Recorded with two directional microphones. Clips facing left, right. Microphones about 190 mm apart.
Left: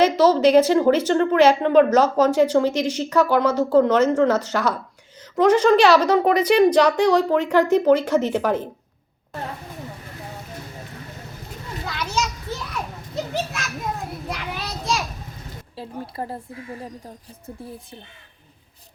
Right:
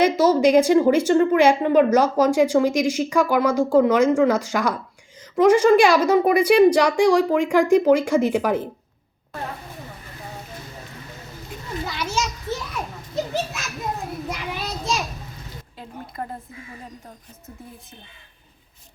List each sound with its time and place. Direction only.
0.0 s a woman's voice: 10° right (ahead or behind)
11.9 s children playing: 5° right (ahead or behind)
14.3 s children playing: centre (ahead or behind)
15.7 s speech: 30° left (ahead or behind)